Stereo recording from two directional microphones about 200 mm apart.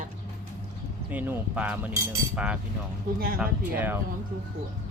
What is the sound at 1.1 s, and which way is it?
Cutlery, 10° right (ahead or behind).